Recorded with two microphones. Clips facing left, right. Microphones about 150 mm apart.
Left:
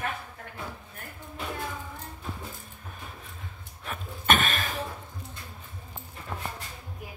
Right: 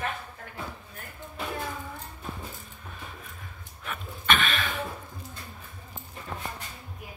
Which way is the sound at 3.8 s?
40° left (ahead or behind).